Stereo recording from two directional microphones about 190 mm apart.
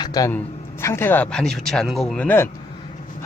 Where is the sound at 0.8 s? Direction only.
15° left (ahead or behind).